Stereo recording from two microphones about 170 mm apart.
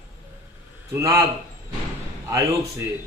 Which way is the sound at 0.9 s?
15° right (ahead or behind).